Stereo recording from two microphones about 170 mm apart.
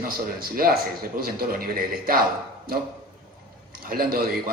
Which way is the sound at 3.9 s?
60° right (ahead or behind).